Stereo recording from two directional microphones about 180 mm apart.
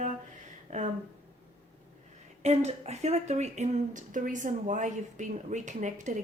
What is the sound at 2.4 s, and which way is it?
Speech, 35° right (ahead or behind).